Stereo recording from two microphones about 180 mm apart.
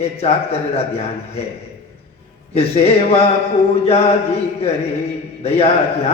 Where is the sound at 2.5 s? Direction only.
35° left (ahead or behind).